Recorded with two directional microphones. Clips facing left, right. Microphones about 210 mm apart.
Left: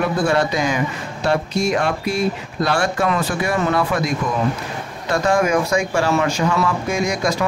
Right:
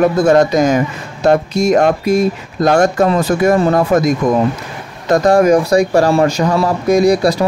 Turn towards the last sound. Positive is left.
turn(degrees=-35)  # may be behind; listen again after turning